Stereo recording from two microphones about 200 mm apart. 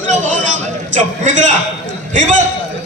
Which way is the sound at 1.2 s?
40° right (ahead or behind).